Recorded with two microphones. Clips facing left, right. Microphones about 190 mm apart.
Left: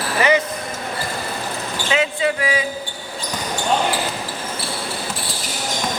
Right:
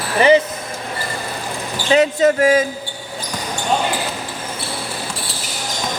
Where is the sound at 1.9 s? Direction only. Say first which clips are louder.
Right 7 dB; 40° right (ahead or behind).